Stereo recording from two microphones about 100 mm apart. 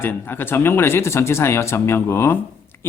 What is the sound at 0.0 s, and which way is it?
Speech, 20° left (ahead or behind).